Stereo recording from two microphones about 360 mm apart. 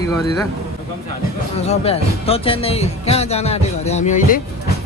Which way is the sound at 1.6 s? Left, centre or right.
Centre.